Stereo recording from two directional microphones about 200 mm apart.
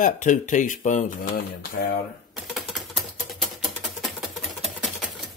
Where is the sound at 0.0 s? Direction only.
40° left (ahead or behind).